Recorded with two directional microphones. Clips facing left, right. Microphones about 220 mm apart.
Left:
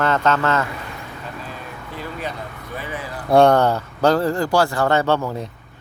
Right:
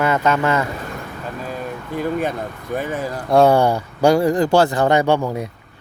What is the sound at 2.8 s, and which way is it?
Speech, 45° right (ahead or behind).